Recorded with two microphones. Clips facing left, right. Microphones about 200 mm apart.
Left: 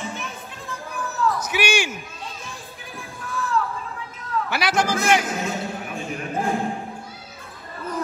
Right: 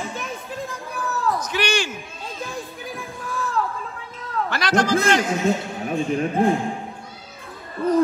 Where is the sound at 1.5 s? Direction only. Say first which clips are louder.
Even; 10° left (ahead or behind).